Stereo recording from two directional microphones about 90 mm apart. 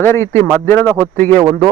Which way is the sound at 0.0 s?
25° left (ahead or behind).